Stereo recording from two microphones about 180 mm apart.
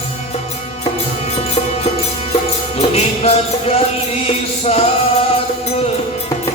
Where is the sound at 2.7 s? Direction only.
35° left (ahead or behind).